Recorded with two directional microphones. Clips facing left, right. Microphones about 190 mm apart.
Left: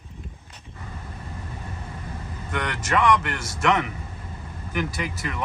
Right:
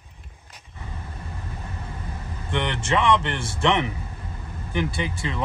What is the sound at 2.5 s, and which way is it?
A man's voice, 25° right (ahead or behind).